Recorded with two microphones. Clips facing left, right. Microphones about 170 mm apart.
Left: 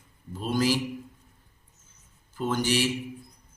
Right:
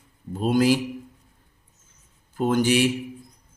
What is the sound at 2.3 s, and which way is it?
Speech, 55° right (ahead or behind).